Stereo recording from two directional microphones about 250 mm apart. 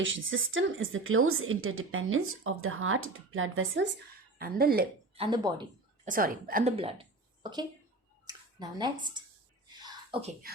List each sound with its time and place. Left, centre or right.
0.0 s a woman's voice: right
4.4 s a woman's voice: right
5.1 s speech: centre
6.1 s a woman's voice: right
8.3 s speech: centre
9.6 s a sound: centre